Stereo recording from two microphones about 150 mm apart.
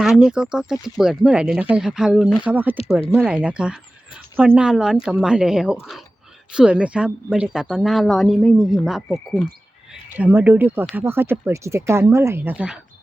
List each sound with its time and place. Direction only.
0.0 s speech: 5° right (ahead or behind)
9.9 s speech: 10° right (ahead or behind)